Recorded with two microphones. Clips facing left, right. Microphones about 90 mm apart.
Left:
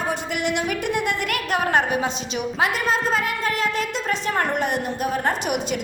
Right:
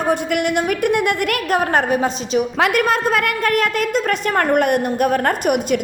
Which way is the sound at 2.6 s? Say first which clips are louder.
Right 3 dB; 65° right (ahead or behind).